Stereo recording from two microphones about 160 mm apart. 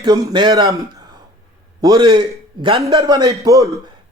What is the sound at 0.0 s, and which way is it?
Speech, 30° right (ahead or behind).